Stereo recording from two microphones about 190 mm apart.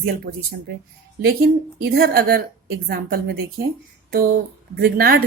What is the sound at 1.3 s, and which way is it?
Speech, 55° right (ahead or behind).